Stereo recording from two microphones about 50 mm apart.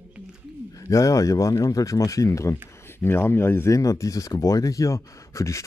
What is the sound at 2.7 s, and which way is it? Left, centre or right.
Speech, left.